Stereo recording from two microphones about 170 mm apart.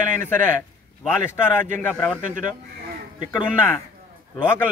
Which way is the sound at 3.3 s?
10° left (ahead or behind).